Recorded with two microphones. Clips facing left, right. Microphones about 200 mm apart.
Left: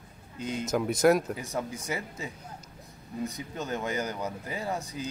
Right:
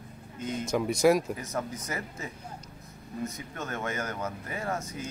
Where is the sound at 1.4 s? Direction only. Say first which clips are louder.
Even; 10° left (ahead or behind).